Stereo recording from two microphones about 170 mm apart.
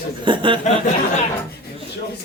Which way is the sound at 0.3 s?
30° right (ahead or behind).